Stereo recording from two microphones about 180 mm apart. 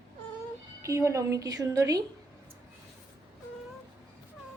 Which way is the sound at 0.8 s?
15° right (ahead or behind).